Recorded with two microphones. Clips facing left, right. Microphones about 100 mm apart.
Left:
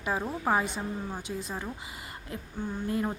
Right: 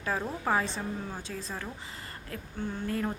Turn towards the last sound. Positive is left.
turn(degrees=20)  # may be behind; listen again after turning